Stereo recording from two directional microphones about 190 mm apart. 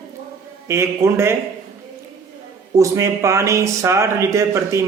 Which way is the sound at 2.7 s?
15° right (ahead or behind).